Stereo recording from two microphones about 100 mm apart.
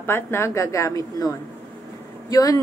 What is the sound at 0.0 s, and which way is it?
A woman's voice, 25° left (ahead or behind).